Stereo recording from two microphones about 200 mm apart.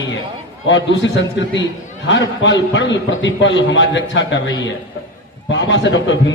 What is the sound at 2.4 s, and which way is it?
A man's voice, 65° left (ahead or behind).